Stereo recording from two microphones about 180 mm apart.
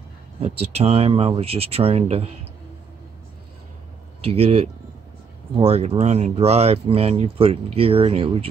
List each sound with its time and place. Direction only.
0.4 s speech: 35° right (ahead or behind)
4.2 s speech: 35° right (ahead or behind)